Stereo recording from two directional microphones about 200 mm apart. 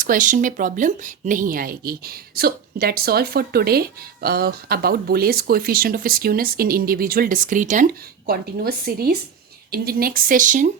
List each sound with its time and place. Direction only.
0.0 s speech: 40° right (ahead or behind)